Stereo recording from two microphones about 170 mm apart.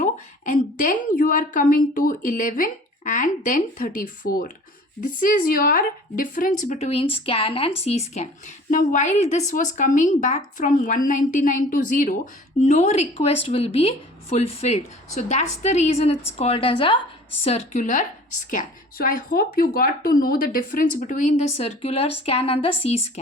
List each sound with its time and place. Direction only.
0.0 s a woman's voice: 50° left (ahead or behind)
6.7 s a woman's voice: 40° left (ahead or behind)